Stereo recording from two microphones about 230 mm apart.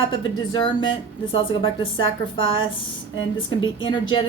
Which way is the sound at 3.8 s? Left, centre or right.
Left.